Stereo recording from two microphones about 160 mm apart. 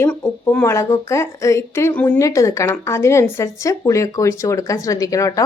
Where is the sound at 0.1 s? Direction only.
5° left (ahead or behind).